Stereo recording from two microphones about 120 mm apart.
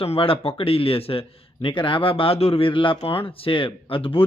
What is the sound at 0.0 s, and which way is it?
Speech, 50° left (ahead or behind).